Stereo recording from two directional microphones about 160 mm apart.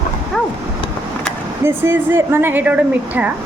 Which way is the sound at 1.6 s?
15° right (ahead or behind).